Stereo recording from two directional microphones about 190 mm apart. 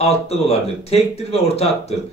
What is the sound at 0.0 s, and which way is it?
Speech, 35° left (ahead or behind).